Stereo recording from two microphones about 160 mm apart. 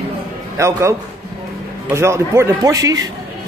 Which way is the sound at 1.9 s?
15° right (ahead or behind).